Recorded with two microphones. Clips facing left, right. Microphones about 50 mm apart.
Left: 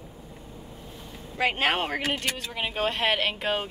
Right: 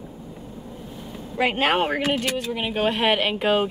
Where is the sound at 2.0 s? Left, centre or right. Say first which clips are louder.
Right 6 dB; centre.